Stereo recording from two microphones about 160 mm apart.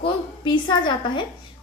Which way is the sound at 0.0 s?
30° left (ahead or behind).